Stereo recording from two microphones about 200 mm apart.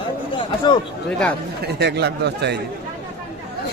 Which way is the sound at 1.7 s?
60° right (ahead or behind).